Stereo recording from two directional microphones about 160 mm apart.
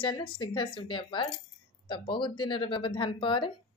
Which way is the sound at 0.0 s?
30° left (ahead or behind).